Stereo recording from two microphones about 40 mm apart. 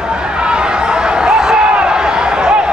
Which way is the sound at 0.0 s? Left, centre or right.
Right.